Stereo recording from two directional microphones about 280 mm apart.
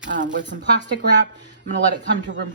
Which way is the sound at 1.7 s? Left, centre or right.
Right.